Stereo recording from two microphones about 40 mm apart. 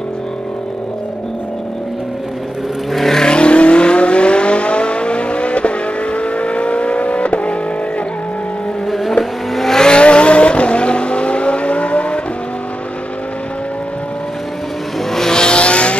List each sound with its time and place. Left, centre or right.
2.9 s vehicle: centre
3.2 s vehicle: left
9.2 s vehicle: centre
9.8 s vehicle: left
15.1 s vehicle: centre